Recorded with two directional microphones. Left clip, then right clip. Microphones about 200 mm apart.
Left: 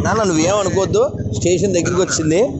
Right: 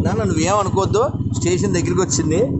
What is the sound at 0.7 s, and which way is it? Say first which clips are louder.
Speech: left 2 dB; 5° left (ahead or behind).